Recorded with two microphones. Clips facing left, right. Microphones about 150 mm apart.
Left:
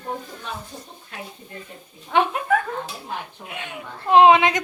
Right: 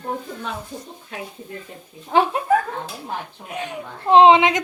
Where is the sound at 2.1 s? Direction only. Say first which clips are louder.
Right 2 dB; 35° right (ahead or behind).